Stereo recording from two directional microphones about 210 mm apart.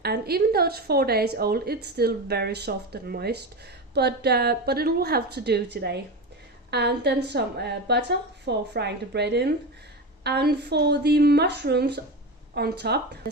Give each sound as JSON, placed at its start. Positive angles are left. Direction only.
{"t": 0.0, "sound": "a woman's voice", "side_deg": -50}